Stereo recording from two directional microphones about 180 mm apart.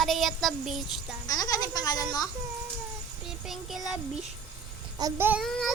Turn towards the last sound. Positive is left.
turn(degrees=-10)  # may be behind; listen again after turning